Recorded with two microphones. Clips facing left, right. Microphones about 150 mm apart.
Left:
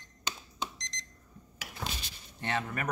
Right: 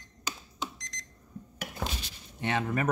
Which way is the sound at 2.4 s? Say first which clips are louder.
Right 4 dB; 15° right (ahead or behind).